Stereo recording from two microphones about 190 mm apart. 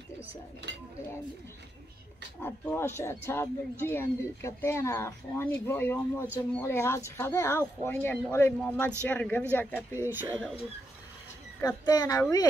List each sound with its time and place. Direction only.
2.4 s speech: 10° left (ahead or behind)
11.6 s speech: 20° left (ahead or behind)